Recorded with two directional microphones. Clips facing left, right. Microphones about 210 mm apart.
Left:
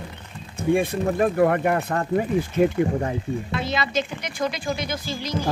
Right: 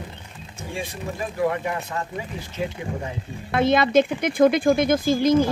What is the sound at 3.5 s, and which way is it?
Speech, 55° right (ahead or behind).